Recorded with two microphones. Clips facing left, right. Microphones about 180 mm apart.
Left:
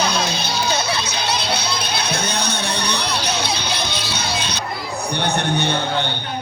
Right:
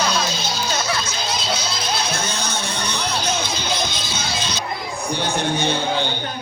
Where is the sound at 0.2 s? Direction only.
60° left (ahead or behind).